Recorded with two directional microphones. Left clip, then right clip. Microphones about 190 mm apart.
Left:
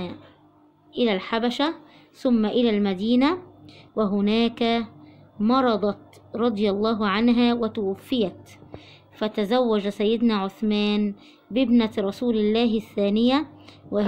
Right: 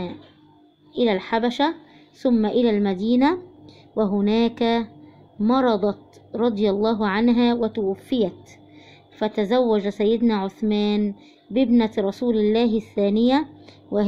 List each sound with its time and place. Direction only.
0.9 s a woman's voice: 5° right (ahead or behind)